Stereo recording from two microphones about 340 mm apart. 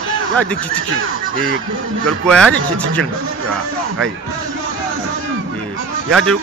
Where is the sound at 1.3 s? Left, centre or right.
Right.